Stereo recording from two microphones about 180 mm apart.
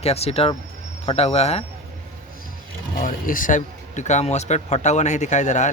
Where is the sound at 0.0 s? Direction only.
35° left (ahead or behind).